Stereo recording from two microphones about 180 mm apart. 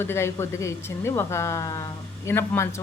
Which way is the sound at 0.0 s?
15° left (ahead or behind).